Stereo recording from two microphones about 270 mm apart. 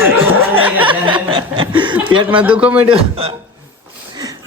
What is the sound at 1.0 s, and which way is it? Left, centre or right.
Chuckle, centre.